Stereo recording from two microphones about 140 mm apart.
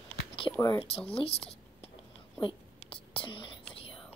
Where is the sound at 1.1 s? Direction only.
45° left (ahead or behind).